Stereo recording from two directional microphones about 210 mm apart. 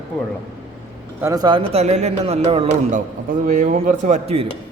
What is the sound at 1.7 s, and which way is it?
A man's voice, 30° right (ahead or behind).